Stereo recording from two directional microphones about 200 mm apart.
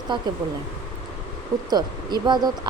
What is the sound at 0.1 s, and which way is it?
Speech, 25° right (ahead or behind).